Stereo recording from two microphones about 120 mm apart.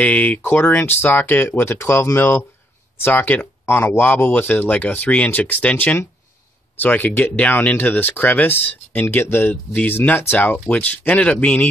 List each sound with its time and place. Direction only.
0.0 s speech: 10° left (ahead or behind)